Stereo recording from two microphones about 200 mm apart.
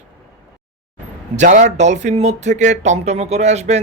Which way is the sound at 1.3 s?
40° right (ahead or behind).